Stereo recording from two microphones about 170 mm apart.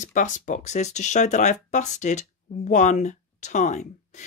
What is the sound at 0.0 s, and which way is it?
A woman's voice, 45° left (ahead or behind).